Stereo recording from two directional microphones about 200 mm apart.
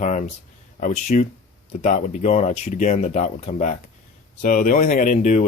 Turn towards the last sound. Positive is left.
turn(degrees=35)  # may be behind; listen again after turning